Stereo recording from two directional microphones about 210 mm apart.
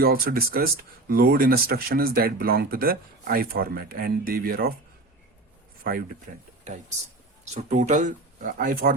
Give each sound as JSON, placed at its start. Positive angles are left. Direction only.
{"t": 0.0, "sound": "speech", "side_deg": -45}
{"t": 6.3, "sound": "speech", "side_deg": -40}
{"t": 7.5, "sound": "speech", "side_deg": -35}